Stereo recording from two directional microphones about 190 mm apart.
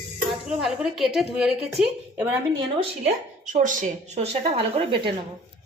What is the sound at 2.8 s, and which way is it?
Speech, 40° right (ahead or behind).